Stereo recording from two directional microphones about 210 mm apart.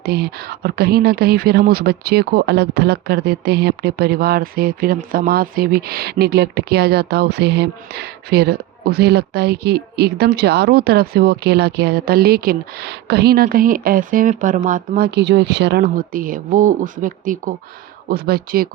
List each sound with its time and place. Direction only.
0.0 s speech: 50° right (ahead or behind)